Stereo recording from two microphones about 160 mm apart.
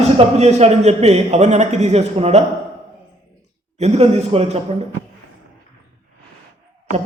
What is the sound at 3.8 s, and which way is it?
Speech, 45° right (ahead or behind).